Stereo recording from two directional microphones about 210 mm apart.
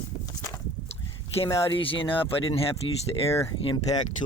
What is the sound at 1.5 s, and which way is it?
Speech, 25° left (ahead or behind).